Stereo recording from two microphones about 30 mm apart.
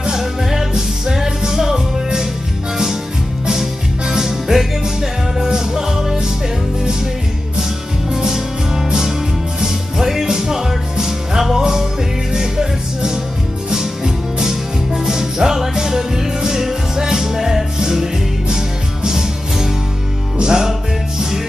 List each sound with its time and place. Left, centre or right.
0.2 s music: centre
4.1 s music: centre
8.1 s music: centre
19.0 s music: centre